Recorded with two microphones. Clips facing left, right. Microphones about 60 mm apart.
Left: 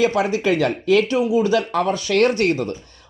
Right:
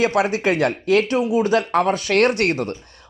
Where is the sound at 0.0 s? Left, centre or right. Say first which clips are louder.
Even; right.